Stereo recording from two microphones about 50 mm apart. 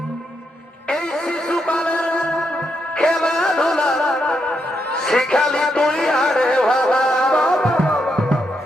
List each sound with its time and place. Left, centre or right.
0.9 s music: centre